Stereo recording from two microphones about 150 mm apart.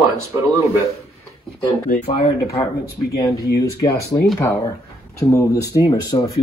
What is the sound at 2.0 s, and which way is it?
Speech, 40° left (ahead or behind).